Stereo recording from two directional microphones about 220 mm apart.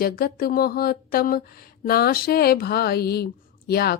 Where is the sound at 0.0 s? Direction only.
40° left (ahead or behind).